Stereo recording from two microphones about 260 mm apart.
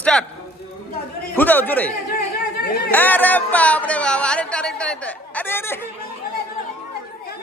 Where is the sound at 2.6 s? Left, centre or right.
Left.